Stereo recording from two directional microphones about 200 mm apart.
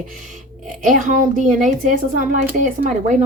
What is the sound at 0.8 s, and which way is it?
A woman's voice, 40° right (ahead or behind).